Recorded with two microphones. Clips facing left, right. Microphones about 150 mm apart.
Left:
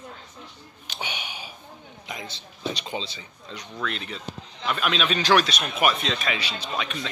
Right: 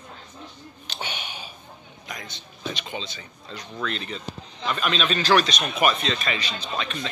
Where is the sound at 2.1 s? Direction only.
25° left (ahead or behind).